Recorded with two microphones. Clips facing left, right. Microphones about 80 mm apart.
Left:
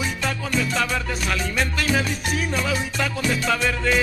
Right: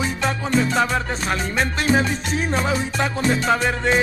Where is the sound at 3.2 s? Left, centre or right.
Right.